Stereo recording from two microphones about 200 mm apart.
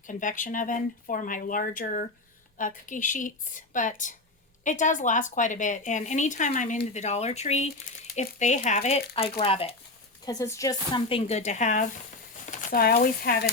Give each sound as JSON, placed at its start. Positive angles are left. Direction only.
{"t": 0.1, "sound": "speech", "side_deg": 40}
{"t": 10.2, "sound": "speech", "side_deg": 15}